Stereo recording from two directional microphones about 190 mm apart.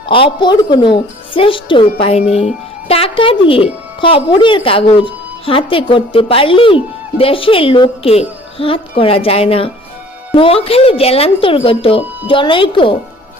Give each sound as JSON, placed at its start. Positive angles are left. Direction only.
{"t": 0.1, "sound": "a woman's voice", "side_deg": 25}